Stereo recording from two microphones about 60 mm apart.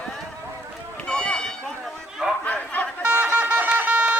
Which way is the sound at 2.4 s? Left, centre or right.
Left.